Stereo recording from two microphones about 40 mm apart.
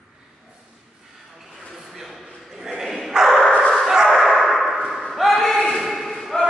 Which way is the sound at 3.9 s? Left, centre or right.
Centre.